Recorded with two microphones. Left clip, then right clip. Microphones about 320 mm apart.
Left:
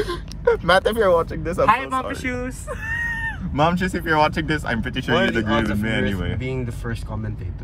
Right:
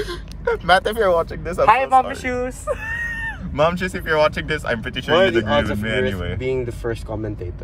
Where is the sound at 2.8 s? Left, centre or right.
Right.